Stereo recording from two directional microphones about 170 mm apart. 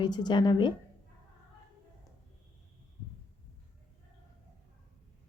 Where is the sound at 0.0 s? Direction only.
25° left (ahead or behind).